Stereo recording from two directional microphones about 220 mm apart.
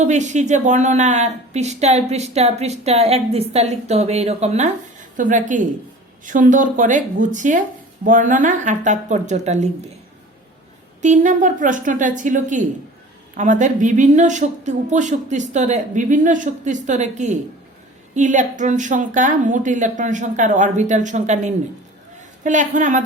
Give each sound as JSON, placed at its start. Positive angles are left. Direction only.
{"t": 0.0, "sound": "a woman's voice", "side_deg": -35}
{"t": 11.0, "sound": "a woman's voice", "side_deg": -35}